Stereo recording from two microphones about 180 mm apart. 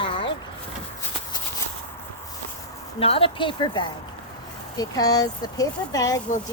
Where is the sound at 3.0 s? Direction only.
30° left (ahead or behind).